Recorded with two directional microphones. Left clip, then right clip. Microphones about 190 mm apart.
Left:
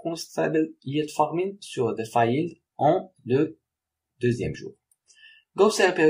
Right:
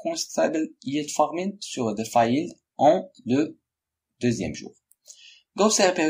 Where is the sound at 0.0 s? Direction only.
35° right (ahead or behind).